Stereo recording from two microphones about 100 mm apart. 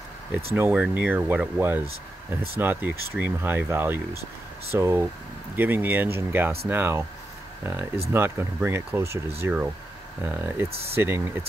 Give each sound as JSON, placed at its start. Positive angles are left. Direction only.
{"t": 0.6, "sound": "speech", "side_deg": -15}